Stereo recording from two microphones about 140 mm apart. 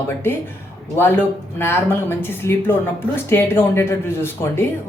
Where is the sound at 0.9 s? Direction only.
15° left (ahead or behind).